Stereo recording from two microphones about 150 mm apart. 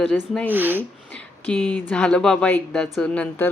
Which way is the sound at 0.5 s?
15° right (ahead or behind).